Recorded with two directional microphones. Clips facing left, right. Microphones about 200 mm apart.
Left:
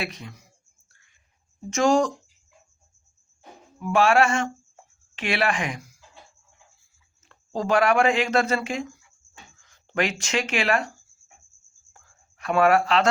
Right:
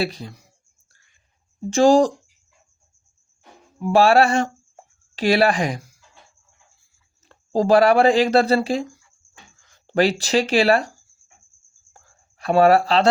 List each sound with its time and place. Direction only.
0.0 s speech: 35° right (ahead or behind)
1.7 s speech: 35° right (ahead or behind)
3.8 s speech: 35° right (ahead or behind)
7.3 s speech: 35° right (ahead or behind)
11.9 s a sound: 35° right (ahead or behind)